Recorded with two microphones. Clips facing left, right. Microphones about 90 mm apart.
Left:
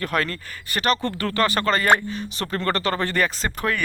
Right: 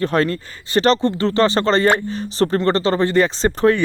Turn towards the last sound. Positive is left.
turn(degrees=-30)  # may be behind; listen again after turning